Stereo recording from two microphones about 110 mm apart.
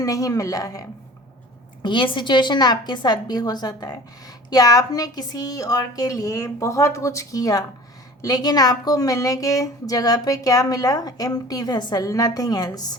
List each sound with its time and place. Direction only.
0.0 s a woman's voice: 30° left (ahead or behind)
1.8 s a woman's voice: 45° left (ahead or behind)